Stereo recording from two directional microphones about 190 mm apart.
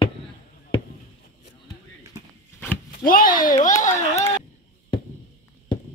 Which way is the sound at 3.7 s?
40° left (ahead or behind).